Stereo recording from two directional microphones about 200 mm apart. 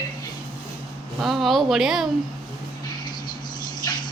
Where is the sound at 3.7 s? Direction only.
20° left (ahead or behind).